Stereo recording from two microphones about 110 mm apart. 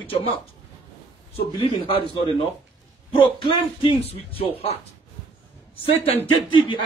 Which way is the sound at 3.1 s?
55° left (ahead or behind).